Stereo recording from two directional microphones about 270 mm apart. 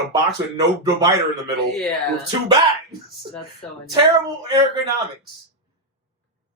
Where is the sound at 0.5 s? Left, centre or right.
Centre.